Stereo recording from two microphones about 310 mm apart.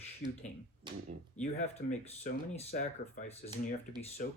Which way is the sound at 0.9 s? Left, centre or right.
Centre.